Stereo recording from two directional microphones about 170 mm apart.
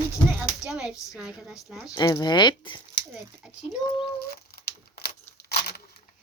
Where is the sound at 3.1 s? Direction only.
15° right (ahead or behind).